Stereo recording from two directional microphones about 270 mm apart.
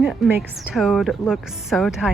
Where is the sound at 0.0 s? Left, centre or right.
Centre.